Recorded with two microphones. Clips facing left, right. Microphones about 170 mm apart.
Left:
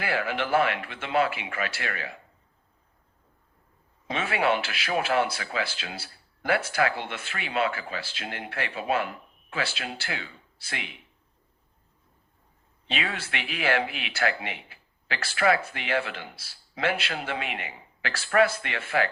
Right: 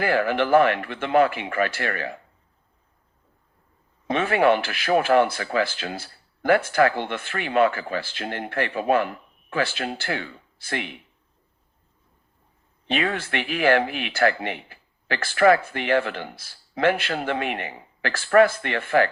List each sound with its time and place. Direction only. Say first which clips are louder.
0.0 s speech: right 7 dB; 50° right (ahead or behind)
4.0 s speech: right 7 dB; 50° right (ahead or behind)
12.9 s speech: right 7 dB; 50° right (ahead or behind)